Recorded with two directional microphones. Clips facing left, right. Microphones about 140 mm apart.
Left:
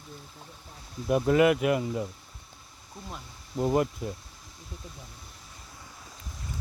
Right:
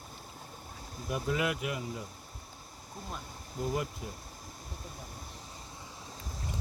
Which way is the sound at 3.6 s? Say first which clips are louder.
Left 8 dB; 55° left (ahead or behind).